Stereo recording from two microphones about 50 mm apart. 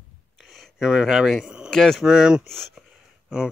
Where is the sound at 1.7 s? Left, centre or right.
Centre.